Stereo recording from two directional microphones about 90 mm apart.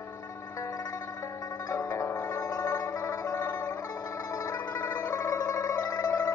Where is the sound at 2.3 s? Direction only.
45° left (ahead or behind).